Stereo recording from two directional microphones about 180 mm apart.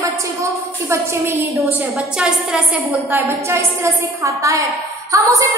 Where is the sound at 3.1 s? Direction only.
15° right (ahead or behind).